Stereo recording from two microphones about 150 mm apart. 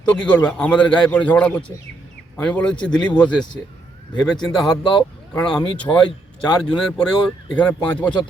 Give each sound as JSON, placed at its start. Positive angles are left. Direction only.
{"t": 0.1, "sound": "a man's voice", "side_deg": 10}
{"t": 4.1, "sound": "a man's voice", "side_deg": 30}
{"t": 5.3, "sound": "a man's voice", "side_deg": 5}